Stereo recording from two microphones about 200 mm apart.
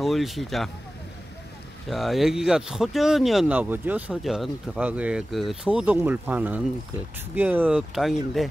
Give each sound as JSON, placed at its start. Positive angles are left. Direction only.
{"t": 0.0, "sound": "speech", "side_deg": 0}
{"t": 1.9, "sound": "speech", "side_deg": 0}